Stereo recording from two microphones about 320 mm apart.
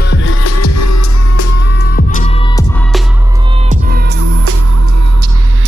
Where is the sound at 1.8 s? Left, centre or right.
Left.